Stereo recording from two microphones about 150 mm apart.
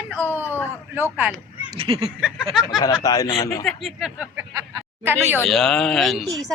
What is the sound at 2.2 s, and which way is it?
Speech, 5° right (ahead or behind).